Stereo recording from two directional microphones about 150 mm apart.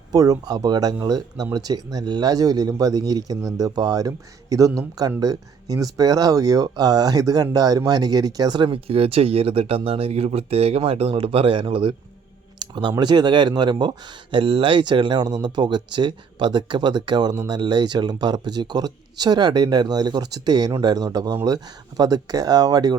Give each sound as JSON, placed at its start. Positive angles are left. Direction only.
{"t": 0.1, "sound": "speech", "side_deg": -25}
{"t": 12.5, "sound": "a sound", "side_deg": -30}
{"t": 13.0, "sound": "speech", "side_deg": -30}